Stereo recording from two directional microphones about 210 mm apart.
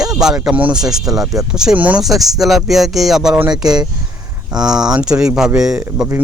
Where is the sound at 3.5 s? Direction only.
20° right (ahead or behind).